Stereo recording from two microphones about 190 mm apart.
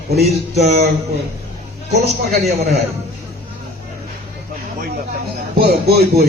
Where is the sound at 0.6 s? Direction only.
55° right (ahead or behind).